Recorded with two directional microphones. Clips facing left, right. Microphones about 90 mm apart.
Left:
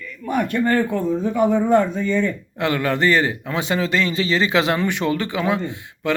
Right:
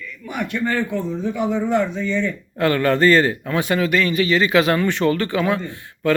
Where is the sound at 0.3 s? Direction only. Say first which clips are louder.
Left 4 dB; 45° left (ahead or behind).